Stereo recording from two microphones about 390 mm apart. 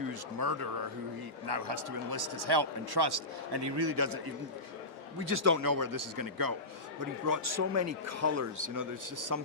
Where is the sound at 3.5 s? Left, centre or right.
Right.